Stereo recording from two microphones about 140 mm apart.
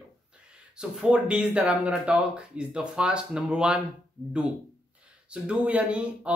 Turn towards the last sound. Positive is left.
turn(degrees=-10)  # may be behind; listen again after turning